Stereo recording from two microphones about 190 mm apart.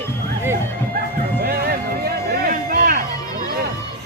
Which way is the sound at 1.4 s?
55° right (ahead or behind).